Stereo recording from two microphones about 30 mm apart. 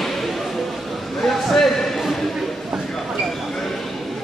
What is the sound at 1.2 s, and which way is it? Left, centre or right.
Speech, centre.